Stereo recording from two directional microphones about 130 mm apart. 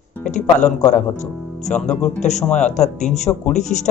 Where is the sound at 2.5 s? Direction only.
65° left (ahead or behind).